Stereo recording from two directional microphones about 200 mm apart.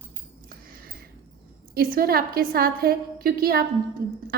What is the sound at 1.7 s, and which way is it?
A woman's voice, 50° right (ahead or behind).